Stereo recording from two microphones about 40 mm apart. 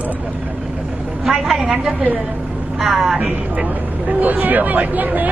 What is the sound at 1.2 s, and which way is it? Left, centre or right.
Speech, centre.